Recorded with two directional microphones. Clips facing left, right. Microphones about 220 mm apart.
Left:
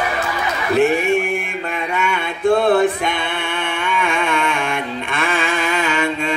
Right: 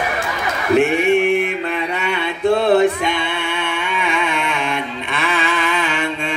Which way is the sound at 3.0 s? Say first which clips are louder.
Right 1 dB; 50° left (ahead or behind).